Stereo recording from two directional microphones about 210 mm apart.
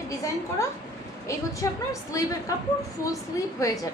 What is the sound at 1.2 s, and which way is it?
A woman's voice, 15° left (ahead or behind).